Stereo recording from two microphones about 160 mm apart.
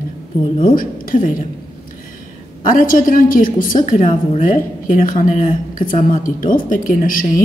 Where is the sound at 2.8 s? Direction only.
55° left (ahead or behind).